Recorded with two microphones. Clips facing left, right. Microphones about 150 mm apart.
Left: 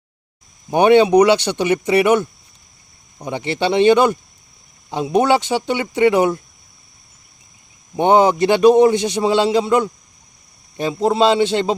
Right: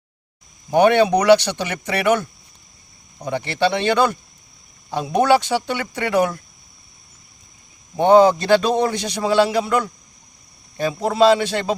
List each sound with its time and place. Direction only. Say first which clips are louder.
0.7 s a man's voice: left 3 dB; 20° left (ahead or behind)
3.2 s a man's voice: even; 20° left (ahead or behind)
7.9 s a man's voice: right 1 dB; 20° left (ahead or behind)